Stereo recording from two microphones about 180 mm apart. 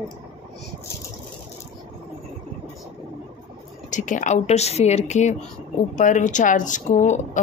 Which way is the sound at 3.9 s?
45° left (ahead or behind).